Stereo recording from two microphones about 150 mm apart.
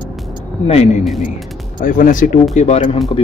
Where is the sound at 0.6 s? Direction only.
45° left (ahead or behind).